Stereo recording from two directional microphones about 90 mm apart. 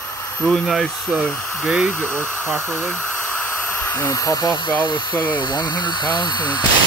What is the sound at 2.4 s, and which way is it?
Speech, 25° right (ahead or behind).